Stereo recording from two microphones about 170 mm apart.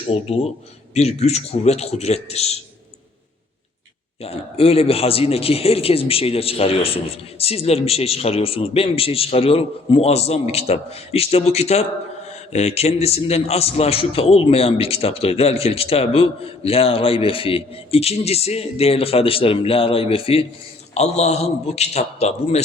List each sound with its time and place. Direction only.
0.1 s a man's voice: 40° left (ahead or behind)
4.2 s a man's voice: 35° left (ahead or behind)